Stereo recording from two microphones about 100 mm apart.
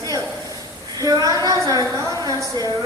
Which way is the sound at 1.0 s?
40° right (ahead or behind).